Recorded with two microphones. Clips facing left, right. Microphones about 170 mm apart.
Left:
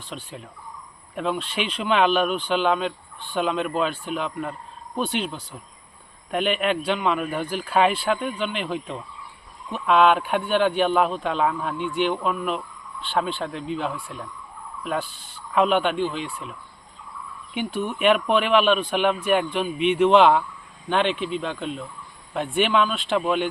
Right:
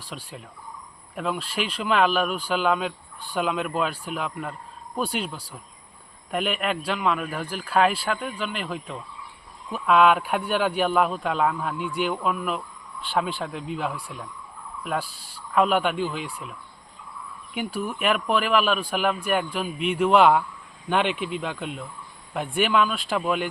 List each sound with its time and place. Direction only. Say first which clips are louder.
0.1 s speech: left 2 dB; 5° right (ahead or behind)
17.7 s speech: left 5 dB; 5° right (ahead or behind)